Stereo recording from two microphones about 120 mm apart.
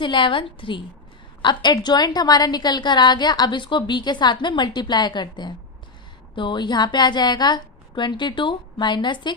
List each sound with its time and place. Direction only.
0.0 s a woman's voice: 40° left (ahead or behind)